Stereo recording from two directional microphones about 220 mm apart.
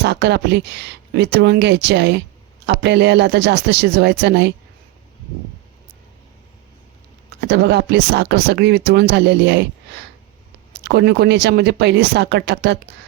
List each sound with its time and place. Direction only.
0.0 s speech: 50° right (ahead or behind)
7.4 s speech: 50° right (ahead or behind)